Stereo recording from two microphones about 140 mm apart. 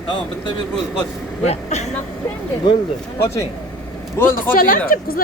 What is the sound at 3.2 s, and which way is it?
Speech, 20° left (ahead or behind).